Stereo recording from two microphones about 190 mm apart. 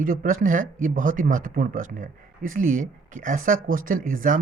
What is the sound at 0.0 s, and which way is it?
Speech, 45° right (ahead or behind).